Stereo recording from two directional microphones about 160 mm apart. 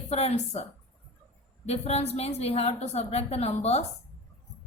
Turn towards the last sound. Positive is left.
turn(degrees=40)  # may be behind; listen again after turning